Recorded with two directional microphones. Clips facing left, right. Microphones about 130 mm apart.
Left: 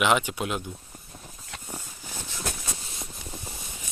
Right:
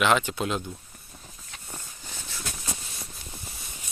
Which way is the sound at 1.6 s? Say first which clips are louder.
Left 1 dB; 10° left (ahead or behind).